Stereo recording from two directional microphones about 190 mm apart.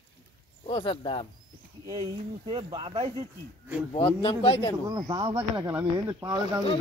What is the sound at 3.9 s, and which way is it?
Speech, 25° left (ahead or behind).